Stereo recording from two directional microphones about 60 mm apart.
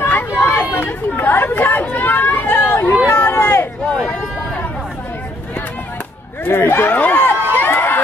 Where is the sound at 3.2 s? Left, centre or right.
Left.